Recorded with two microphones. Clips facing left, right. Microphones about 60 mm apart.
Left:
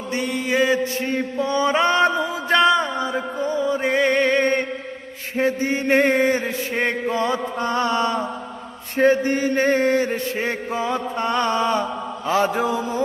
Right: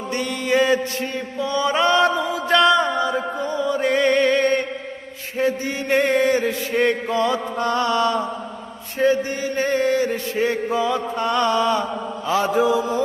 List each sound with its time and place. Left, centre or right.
0.1 s mantra: centre
1.0 s a sound: left
3.4 s music: left
5.4 s chant: left
9.0 s chant: left
12.3 s mantra: left